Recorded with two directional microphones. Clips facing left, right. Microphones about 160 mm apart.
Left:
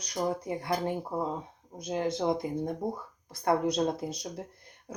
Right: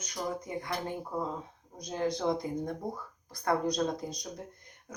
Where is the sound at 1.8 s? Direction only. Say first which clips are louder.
Left 2 dB; 25° left (ahead or behind).